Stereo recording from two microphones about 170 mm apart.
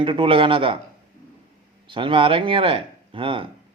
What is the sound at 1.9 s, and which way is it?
Speech, 30° right (ahead or behind).